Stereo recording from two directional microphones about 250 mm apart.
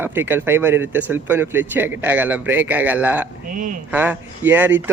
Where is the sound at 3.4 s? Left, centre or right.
Right.